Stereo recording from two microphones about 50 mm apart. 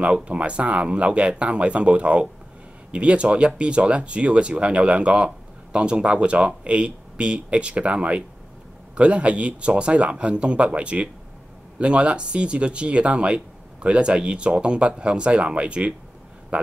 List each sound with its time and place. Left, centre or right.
0.0 s speech: right